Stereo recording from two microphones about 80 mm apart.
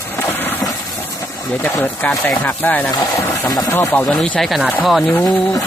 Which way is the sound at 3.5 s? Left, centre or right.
Left.